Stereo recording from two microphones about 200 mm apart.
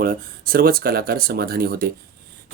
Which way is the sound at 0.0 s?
50° right (ahead or behind).